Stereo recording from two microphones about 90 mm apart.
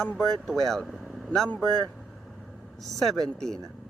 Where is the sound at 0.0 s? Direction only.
10° left (ahead or behind).